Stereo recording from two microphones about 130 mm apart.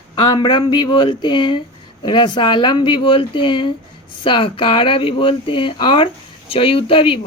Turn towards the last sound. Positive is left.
turn(degrees=40)  # may be behind; listen again after turning